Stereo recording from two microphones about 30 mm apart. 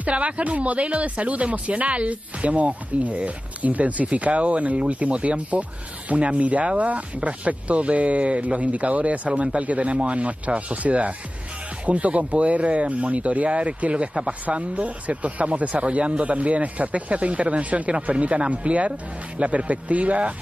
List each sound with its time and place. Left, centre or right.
0.0 s speech: right